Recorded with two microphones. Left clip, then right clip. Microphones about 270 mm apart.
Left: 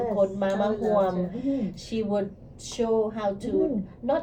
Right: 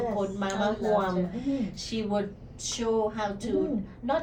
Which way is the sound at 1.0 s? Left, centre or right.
Centre.